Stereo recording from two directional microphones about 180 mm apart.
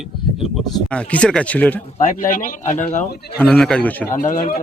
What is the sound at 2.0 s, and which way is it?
Speech, 45° left (ahead or behind).